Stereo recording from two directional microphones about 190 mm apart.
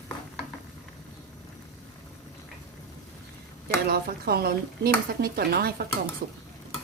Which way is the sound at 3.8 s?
55° right (ahead or behind).